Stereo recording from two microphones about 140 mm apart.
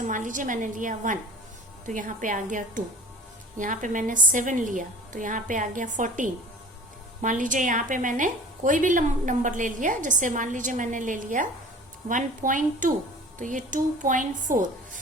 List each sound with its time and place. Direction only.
0.0 s a woman's voice: 65° right (ahead or behind)